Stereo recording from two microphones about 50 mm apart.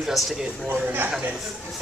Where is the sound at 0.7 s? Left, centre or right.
Right.